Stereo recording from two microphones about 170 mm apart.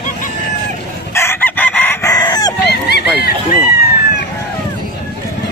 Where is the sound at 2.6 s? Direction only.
75° left (ahead or behind).